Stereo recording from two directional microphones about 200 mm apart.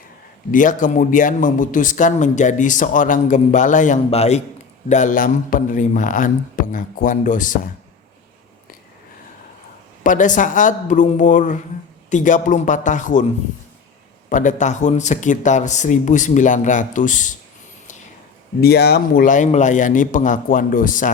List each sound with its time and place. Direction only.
0.5 s speech: 40° left (ahead or behind)
10.0 s speech: 40° left (ahead or behind)
14.3 s speech: 40° left (ahead or behind)
18.6 s speech: 50° left (ahead or behind)